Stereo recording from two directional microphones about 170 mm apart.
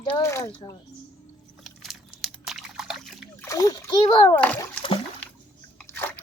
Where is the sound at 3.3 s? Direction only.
20° left (ahead or behind).